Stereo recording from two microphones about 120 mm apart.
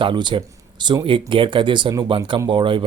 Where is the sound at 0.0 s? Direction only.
40° right (ahead or behind).